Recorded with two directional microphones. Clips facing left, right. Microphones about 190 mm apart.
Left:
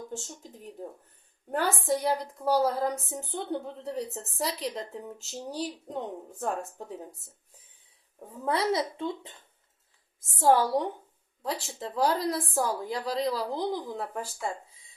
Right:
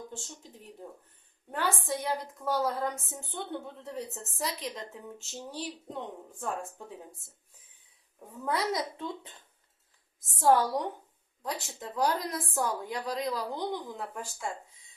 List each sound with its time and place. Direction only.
1.5 s a woman's voice: 40° left (ahead or behind)
8.4 s a woman's voice: 30° left (ahead or behind)